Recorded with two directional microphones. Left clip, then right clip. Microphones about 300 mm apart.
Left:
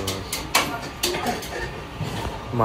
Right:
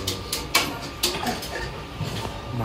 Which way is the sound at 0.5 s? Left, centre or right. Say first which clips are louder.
Left 2 dB; centre.